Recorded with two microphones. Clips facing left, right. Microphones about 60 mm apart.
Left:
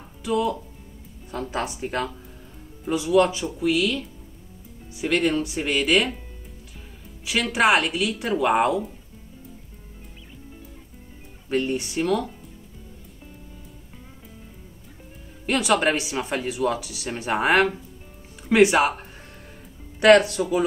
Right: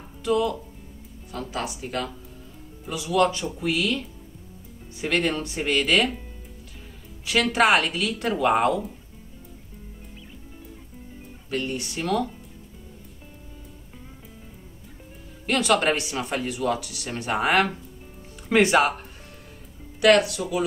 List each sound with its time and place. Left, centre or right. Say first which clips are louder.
0.2 s speech: right 1 dB; centre
1.3 s speech: left 3 dB; left
3.2 s speech: left 1 dB; centre
3.6 s speech: left 3 dB; centre
5.0 s speech: left 2 dB; centre
7.2 s speech: even; centre
11.4 s speech: left 4 dB; left
15.7 s speech: left 1 dB; centre
20.0 s speech: left 3 dB; left